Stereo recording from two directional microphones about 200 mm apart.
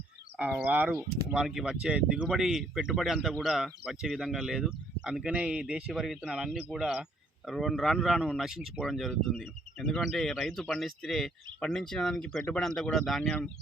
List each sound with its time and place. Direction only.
0.3 s speech: 10° right (ahead or behind)